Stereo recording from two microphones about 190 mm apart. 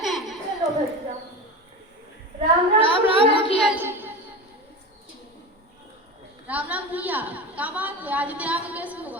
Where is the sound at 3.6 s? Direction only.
5° right (ahead or behind).